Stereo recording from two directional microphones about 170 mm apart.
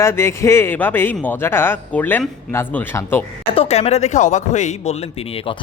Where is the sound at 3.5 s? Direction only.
40° left (ahead or behind).